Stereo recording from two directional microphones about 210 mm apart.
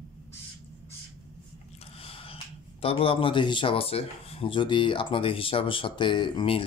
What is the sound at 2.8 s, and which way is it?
Speech, 25° left (ahead or behind).